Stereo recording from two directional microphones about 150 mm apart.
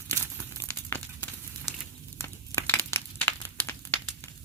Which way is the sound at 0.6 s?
20° left (ahead or behind).